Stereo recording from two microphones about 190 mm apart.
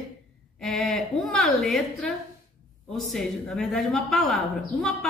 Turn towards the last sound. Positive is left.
turn(degrees=5)  # may be behind; listen again after turning